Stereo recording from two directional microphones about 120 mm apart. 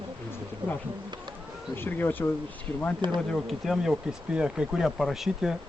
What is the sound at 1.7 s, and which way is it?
Speech, 15° left (ahead or behind).